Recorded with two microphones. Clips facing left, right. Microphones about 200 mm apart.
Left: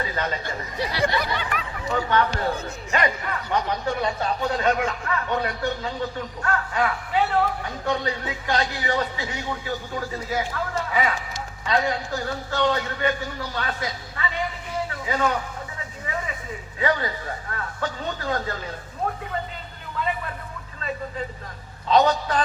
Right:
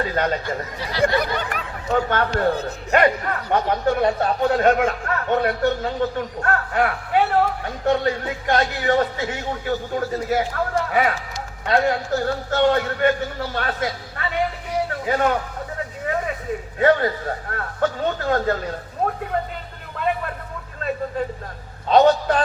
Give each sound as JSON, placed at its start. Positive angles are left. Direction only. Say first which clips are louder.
{"t": 0.0, "sound": "speech", "louder": "right 6 dB", "side_deg": -50}
{"t": 14.8, "sound": "a sound", "louder": "right 4 dB", "side_deg": -55}
{"t": 16.7, "sound": "speech", "louder": "right 7 dB", "side_deg": -55}
{"t": 21.8, "sound": "a man's voice", "louder": "right 5 dB", "side_deg": -55}